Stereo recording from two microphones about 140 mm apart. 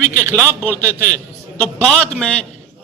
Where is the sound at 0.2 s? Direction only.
20° right (ahead or behind).